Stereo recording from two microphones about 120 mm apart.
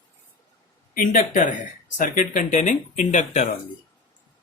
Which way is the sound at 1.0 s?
90° left.